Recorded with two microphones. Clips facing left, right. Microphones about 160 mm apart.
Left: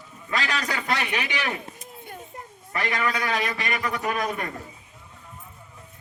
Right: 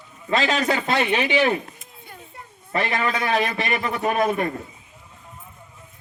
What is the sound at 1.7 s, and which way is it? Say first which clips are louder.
Children playing: left 4 dB; 45° left (ahead or behind).